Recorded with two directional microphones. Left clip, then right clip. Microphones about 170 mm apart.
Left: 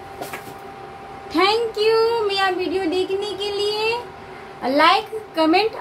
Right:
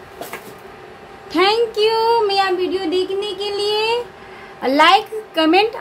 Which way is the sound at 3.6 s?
50° right (ahead or behind).